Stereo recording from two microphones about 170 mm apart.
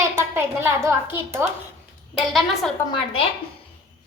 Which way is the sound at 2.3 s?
Centre (ahead or behind).